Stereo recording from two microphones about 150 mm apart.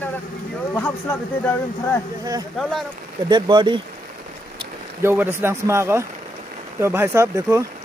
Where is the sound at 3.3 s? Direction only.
30° right (ahead or behind).